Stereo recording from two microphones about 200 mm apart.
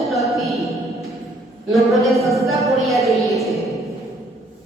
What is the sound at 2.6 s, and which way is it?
Speech, centre (ahead or behind).